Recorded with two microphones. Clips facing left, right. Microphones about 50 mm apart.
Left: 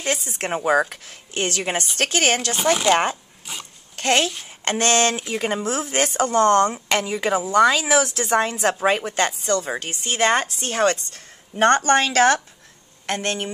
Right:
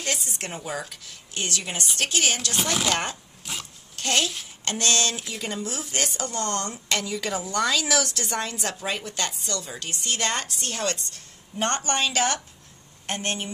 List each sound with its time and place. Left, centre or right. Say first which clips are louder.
0.4 s speech: left 13 dB; left
2.9 s a woman's voice: left 8 dB; left
3.5 s dog: left 1 dB; centre
3.9 s a child's voice: left 5 dB; left